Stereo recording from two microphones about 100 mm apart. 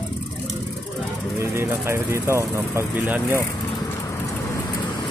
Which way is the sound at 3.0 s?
15° right (ahead or behind).